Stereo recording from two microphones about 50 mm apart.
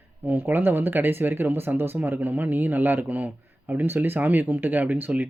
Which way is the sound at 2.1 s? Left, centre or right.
Right.